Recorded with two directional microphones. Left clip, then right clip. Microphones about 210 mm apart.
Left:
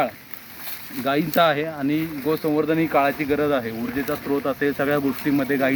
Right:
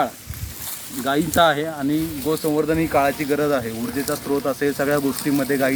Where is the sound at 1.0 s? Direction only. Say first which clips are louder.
Right 2 dB; 35° left (ahead or behind).